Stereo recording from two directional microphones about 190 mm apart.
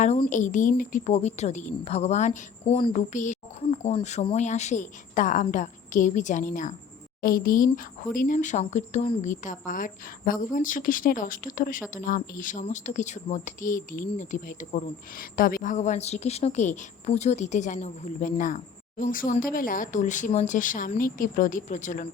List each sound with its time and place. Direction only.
0.3 s a woman's voice: 40° left (ahead or behind)